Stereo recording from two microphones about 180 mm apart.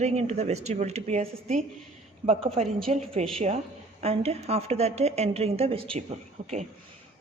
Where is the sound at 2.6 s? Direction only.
Centre (ahead or behind).